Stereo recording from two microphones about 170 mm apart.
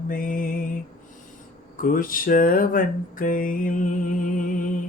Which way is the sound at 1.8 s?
55° left (ahead or behind).